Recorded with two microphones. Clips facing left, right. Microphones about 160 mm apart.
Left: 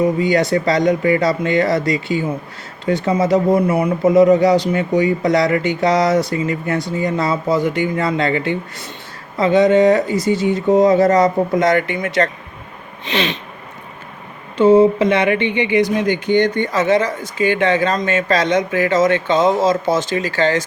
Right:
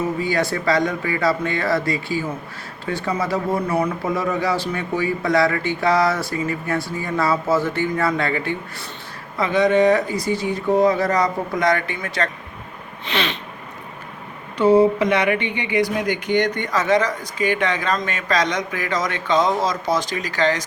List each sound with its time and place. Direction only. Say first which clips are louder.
0.0 s speech: left 6 dB; 20° left (ahead or behind)
13.1 s a sound: left 4 dB; 15° left (ahead or behind)
14.6 s speech: left 4 dB; 20° left (ahead or behind)